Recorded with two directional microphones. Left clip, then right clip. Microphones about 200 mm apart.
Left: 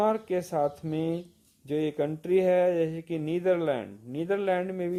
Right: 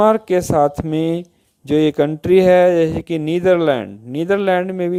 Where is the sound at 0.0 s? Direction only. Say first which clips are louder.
Right 13 dB; 40° right (ahead or behind).